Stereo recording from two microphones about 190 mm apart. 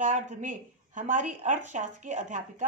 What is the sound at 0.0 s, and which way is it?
A woman's voice, 40° right (ahead or behind).